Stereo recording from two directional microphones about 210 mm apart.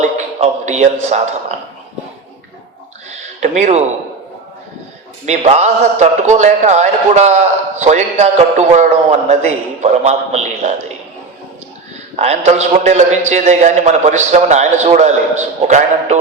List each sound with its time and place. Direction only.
0.0 s a man's voice: 30° right (ahead or behind)
3.1 s a sound: 35° right (ahead or behind)
5.2 s a man's voice: 35° right (ahead or behind)
12.1 s a man's voice: 30° right (ahead or behind)